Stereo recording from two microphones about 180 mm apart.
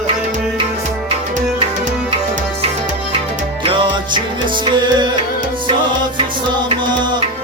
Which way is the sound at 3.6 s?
25° right (ahead or behind).